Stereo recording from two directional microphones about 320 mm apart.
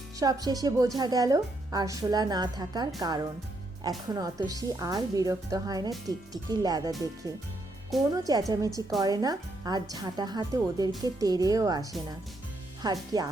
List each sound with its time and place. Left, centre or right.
0.2 s a woman's voice: centre
8.1 s a woman's voice: centre